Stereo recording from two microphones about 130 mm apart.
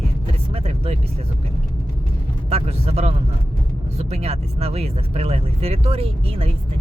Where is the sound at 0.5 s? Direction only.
55° right (ahead or behind).